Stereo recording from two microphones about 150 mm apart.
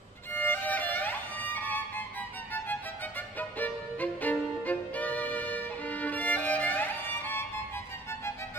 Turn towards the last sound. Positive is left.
turn(degrees=15)  # may be behind; listen again after turning